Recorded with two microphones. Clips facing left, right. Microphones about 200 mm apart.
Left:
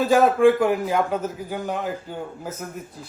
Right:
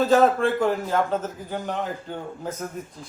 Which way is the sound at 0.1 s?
10° left (ahead or behind).